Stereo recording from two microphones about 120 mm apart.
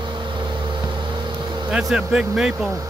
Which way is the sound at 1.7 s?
10° right (ahead or behind).